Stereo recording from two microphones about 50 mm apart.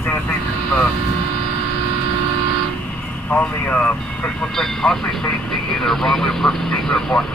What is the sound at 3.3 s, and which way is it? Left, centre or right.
Speech, left.